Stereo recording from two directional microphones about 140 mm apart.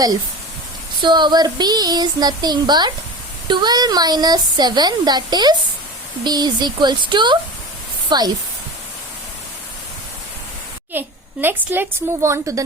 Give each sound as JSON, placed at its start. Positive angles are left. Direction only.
{"t": 1.0, "sound": "child singing", "side_deg": -35}
{"t": 3.4, "sound": "a woman's voice", "side_deg": -30}
{"t": 10.9, "sound": "a child's voice", "side_deg": -15}